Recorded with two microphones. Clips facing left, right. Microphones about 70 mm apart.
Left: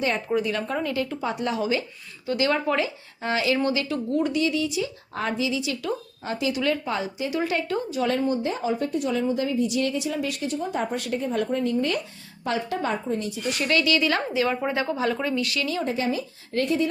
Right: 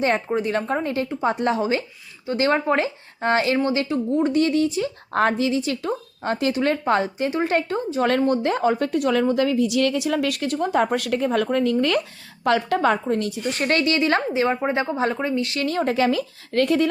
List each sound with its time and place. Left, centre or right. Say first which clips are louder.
0.3 s speech: right 3 dB; right
3.6 s speech: right 3 dB; right
4.4 s speech: right 5 dB; right
7.3 s speech: right 2 dB; right
8.0 s a woman's voice: right 5 dB; right
12.5 s a woman's voice: right 7 dB; right
13.5 s speech: right 1 dB; right
15.6 s speech: right 4 dB; right
15.9 s a woman's voice: right 6 dB; right